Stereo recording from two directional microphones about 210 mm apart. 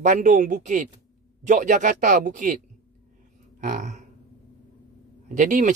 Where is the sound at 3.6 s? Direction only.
35° right (ahead or behind).